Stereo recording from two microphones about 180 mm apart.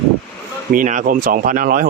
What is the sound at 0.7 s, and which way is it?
Speech, 45° right (ahead or behind).